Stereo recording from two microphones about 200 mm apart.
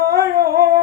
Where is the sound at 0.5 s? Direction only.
20° right (ahead or behind).